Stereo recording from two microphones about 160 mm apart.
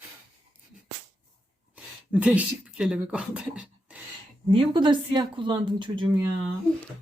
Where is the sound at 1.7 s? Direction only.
5° right (ahead or behind).